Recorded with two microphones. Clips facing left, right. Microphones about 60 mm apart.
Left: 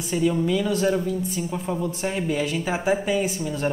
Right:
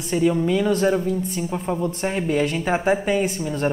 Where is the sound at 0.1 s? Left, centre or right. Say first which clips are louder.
Right 3 dB; right.